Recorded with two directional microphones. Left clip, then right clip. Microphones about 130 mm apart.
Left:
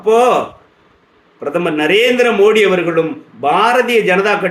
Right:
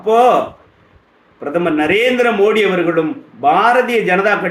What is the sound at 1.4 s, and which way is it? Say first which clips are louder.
A man's voice: even; 20° left (ahead or behind).